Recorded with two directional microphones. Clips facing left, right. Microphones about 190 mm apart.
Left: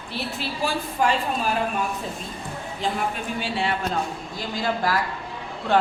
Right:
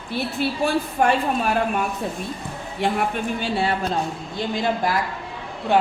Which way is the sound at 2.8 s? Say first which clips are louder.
Right 4 dB; 65° right (ahead or behind).